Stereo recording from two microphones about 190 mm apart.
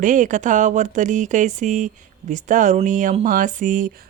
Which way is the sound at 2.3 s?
40° right (ahead or behind).